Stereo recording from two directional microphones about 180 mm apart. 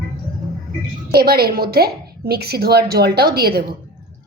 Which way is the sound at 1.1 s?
60° right (ahead or behind).